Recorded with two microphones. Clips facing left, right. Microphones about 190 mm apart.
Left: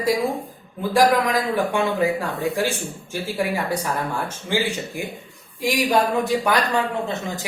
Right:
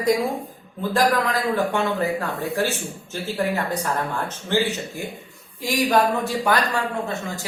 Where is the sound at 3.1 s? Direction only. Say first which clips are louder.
Even; 10° left (ahead or behind).